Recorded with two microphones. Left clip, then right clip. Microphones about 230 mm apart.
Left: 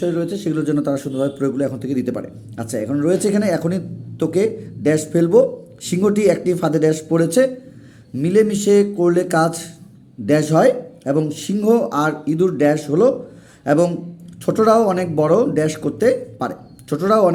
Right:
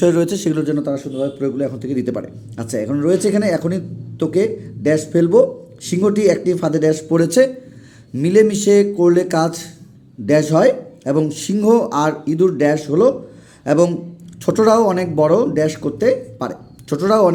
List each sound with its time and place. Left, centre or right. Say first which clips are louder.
0.0 s speech: right 6 dB; right
0.6 s a man's voice: even; centre